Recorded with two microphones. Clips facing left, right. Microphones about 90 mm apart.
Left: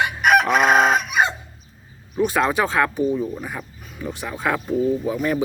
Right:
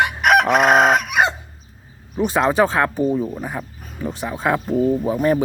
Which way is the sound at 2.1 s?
25° right (ahead or behind).